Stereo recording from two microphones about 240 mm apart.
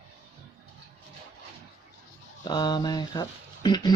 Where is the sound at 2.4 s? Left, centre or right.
Centre.